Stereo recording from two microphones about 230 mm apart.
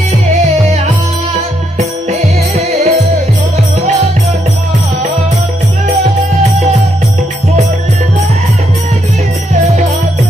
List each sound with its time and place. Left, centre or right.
1.8 s music: right